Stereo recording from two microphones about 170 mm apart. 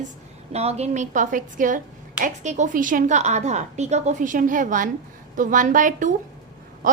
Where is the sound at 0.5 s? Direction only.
40° right (ahead or behind).